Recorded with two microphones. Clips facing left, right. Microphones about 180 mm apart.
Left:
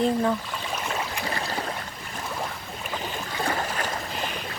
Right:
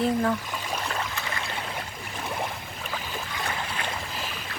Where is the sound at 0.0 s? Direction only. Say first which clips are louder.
Left 1 dB; 5° left (ahead or behind).